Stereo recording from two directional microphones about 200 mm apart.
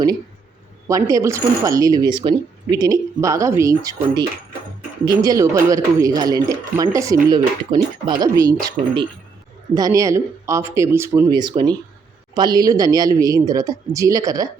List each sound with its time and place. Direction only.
0.9 s speech: 15° right (ahead or behind)
8.8 s speech: 40° right (ahead or behind)
9.7 s speech: 15° right (ahead or behind)